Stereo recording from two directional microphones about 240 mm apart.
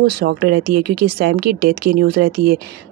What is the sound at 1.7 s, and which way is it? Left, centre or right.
Speech, right.